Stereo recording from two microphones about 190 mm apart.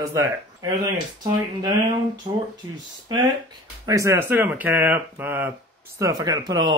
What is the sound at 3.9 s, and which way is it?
Speech, 15° right (ahead or behind).